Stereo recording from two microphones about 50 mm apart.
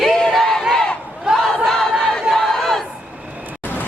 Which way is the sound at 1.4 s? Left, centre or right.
Centre.